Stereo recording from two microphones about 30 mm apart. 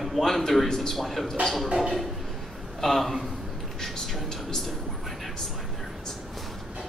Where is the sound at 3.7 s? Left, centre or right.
Centre.